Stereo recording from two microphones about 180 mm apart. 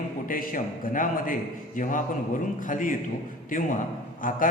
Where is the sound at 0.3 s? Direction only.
50° left (ahead or behind).